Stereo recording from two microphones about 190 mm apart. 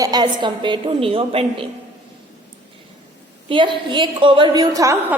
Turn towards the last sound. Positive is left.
turn(degrees=-20)  # may be behind; listen again after turning